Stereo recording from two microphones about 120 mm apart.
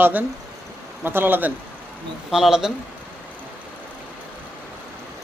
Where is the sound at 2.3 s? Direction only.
5° right (ahead or behind).